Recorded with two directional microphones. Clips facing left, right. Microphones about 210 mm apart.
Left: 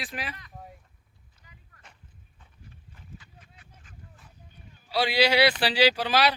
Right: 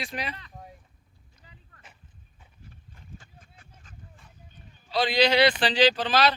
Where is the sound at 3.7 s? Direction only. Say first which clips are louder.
Right 1 dB; 5° left (ahead or behind).